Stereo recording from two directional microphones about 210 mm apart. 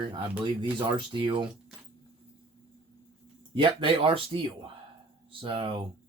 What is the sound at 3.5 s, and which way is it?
Speech, 25° right (ahead or behind).